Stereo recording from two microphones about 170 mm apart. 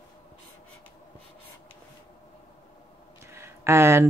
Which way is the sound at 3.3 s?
15° right (ahead or behind).